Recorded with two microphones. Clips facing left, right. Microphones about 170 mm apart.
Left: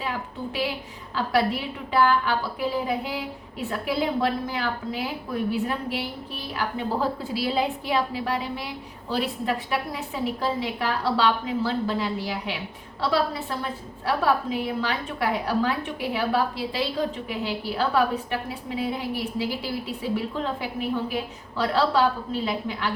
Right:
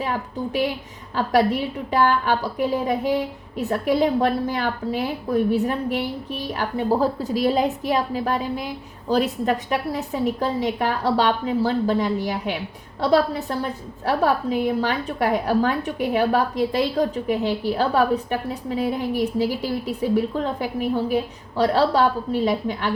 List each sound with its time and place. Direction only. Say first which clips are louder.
0.0 s a woman's voice: right 5 dB; 45° right (ahead or behind)